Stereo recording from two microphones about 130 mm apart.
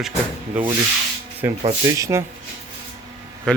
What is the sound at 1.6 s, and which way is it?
Speech, 40° right (ahead or behind).